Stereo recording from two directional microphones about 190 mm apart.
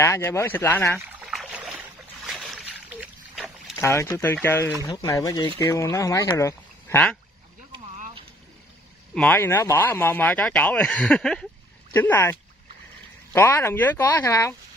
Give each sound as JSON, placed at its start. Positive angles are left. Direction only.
{"t": 0.0, "sound": "speech", "side_deg": 15}
{"t": 1.2, "sound": "boat", "side_deg": 0}
{"t": 3.8, "sound": "speech", "side_deg": 15}
{"t": 9.1, "sound": "speech", "side_deg": 10}